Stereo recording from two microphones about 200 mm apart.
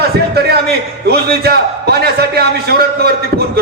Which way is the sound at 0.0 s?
50° right (ahead or behind).